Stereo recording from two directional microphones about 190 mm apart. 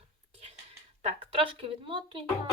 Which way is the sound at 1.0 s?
30° right (ahead or behind).